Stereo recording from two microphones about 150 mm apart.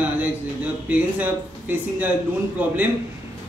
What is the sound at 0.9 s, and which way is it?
A man's voice, 10° right (ahead or behind).